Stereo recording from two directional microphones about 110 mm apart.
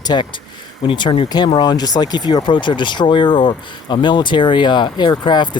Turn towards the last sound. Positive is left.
turn(degrees=45)  # may be behind; listen again after turning